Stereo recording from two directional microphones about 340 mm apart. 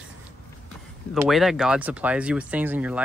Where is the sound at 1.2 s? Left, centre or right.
Centre.